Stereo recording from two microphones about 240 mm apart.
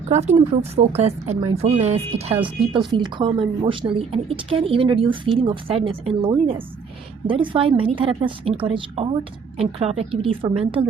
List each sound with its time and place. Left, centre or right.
0.1 s speech: right